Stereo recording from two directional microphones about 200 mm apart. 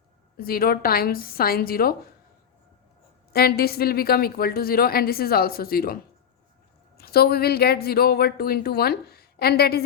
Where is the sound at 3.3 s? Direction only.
50° left (ahead or behind).